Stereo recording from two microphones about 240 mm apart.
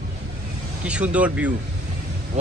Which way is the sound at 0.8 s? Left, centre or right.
Centre.